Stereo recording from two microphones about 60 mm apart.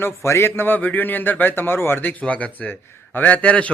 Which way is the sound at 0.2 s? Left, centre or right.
Left.